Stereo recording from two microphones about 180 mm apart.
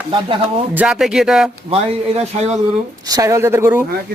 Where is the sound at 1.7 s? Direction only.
35° right (ahead or behind).